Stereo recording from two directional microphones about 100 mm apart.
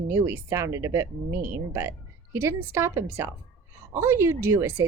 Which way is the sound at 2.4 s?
25° right (ahead or behind).